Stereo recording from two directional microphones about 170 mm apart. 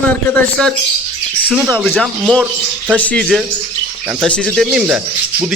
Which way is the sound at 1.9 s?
Centre (ahead or behind).